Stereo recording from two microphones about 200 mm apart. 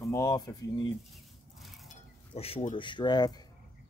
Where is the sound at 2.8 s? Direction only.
25° left (ahead or behind).